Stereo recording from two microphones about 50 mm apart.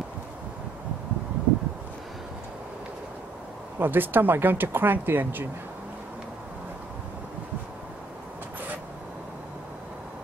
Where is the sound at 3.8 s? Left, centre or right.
Right.